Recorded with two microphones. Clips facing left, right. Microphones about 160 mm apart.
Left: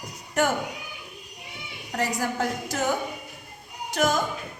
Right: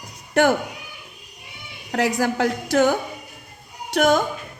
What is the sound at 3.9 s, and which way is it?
Speech, 70° right (ahead or behind).